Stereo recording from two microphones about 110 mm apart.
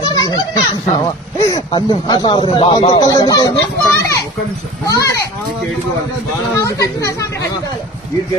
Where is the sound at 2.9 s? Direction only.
35° left (ahead or behind).